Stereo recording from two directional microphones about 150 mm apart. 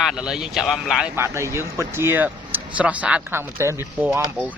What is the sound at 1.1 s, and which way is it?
Speech, 20° right (ahead or behind).